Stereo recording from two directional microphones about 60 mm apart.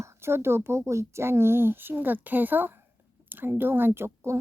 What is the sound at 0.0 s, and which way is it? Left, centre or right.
Speech, right.